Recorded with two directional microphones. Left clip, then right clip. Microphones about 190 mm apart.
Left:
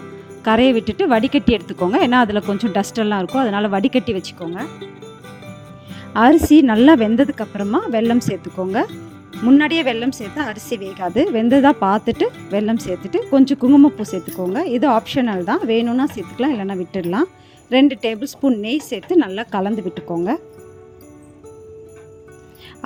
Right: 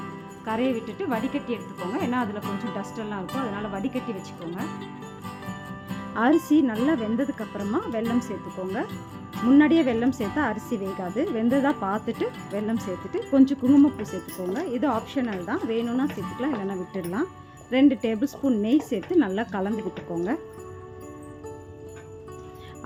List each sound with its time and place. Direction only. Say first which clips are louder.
0.4 s speech: left 12 dB; 50° left (ahead or behind)
5.9 s speech: left 10 dB; 45° left (ahead or behind)